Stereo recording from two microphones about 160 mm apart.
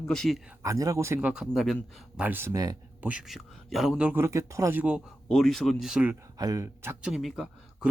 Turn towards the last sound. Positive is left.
turn(degrees=0)  # may be behind; listen again after turning